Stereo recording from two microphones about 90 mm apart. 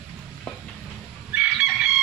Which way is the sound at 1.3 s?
15° right (ahead or behind).